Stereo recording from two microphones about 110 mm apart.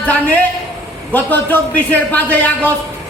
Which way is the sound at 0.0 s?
15° left (ahead or behind).